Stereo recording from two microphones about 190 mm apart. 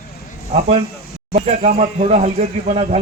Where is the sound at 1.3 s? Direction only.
35° right (ahead or behind).